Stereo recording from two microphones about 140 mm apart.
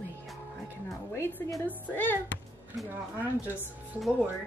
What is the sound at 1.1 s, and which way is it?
Music, 15° left (ahead or behind).